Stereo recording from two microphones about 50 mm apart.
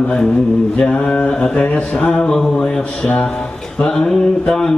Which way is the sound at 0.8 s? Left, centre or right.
Left.